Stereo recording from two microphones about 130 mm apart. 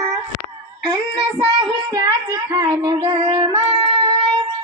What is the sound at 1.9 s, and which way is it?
Child singing, 25° right (ahead or behind).